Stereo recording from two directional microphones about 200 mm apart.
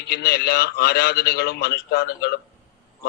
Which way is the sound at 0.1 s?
50° left (ahead or behind).